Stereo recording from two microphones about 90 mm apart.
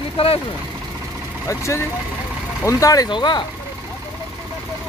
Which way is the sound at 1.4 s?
35° left (ahead or behind).